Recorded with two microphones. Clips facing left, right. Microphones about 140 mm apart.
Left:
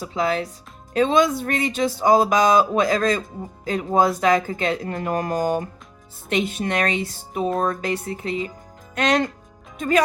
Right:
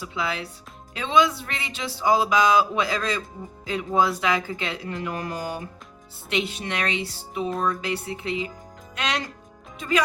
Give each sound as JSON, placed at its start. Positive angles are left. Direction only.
{"t": 0.0, "sound": "speech", "side_deg": 45}